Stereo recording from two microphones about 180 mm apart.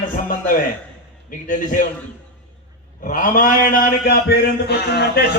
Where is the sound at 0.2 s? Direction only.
50° left (ahead or behind).